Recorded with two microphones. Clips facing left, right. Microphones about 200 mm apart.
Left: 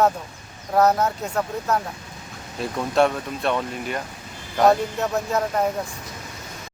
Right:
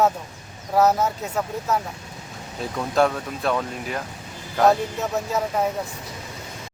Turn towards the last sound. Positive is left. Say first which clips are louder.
# left 1 dB
turn(degrees=0)  # may be behind; listen again after turning